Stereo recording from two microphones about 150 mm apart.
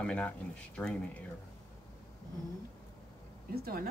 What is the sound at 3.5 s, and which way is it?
Speech, 90° right.